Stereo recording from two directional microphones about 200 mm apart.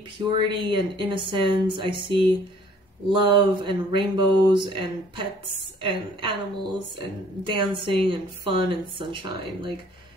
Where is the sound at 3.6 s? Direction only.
25° right (ahead or behind).